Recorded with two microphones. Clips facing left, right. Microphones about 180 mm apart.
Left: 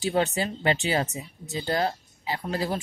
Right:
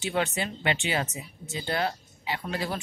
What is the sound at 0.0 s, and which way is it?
Speech, 35° left (ahead or behind).